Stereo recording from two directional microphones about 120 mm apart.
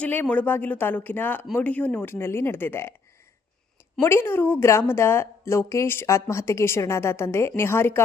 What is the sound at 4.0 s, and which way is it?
A woman's voice, 20° left (ahead or behind).